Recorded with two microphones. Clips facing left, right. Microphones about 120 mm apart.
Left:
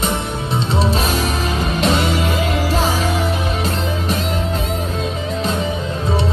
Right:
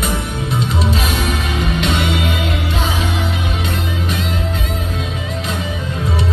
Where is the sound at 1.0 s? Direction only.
30° left (ahead or behind).